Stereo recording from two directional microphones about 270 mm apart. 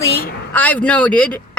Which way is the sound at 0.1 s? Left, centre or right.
Left.